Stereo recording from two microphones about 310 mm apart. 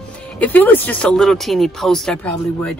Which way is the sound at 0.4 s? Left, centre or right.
Centre.